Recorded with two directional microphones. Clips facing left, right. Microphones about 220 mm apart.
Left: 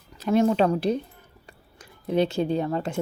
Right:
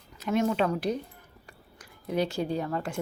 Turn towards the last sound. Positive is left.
turn(degrees=25)  # may be behind; listen again after turning